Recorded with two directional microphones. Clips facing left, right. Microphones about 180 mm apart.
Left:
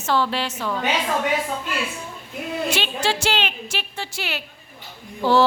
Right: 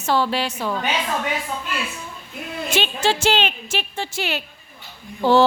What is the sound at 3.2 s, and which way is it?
A woman's voice, 25° right (ahead or behind).